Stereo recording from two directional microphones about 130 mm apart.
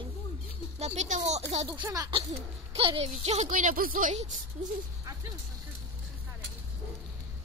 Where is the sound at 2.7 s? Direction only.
45° right (ahead or behind).